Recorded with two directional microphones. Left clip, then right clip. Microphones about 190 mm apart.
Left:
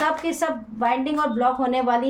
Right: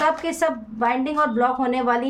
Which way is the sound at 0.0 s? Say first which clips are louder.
Right 2 dB; 30° right (ahead or behind).